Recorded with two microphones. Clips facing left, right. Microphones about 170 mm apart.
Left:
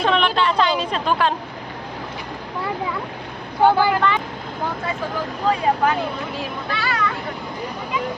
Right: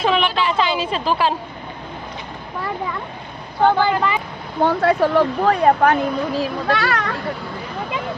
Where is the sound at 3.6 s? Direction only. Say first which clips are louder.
Even; 10° left (ahead or behind).